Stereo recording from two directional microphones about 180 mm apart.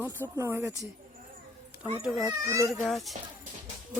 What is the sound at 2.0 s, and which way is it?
Speech, centre (ahead or behind).